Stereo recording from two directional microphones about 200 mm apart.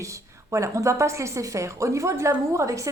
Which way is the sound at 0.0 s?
15° right (ahead or behind).